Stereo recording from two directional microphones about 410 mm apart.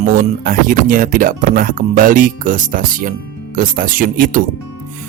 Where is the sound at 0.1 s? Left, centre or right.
Centre.